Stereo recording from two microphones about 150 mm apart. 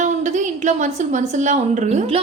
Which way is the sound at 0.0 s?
55° right (ahead or behind).